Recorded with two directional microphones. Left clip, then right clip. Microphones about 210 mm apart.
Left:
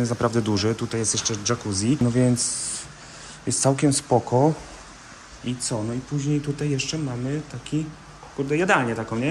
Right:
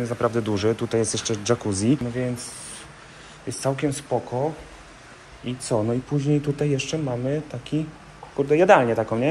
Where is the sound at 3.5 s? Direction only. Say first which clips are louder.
Left 4 dB; 20° left (ahead or behind).